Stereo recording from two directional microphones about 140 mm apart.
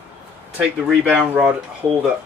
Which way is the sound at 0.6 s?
5° right (ahead or behind).